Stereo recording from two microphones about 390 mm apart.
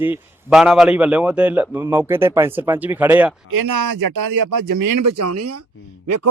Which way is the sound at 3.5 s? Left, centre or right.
Right.